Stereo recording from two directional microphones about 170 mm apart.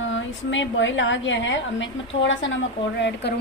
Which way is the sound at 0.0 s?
90° left.